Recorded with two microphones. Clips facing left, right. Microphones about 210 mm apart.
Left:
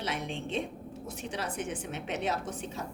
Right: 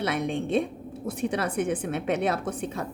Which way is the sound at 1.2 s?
55° right (ahead or behind).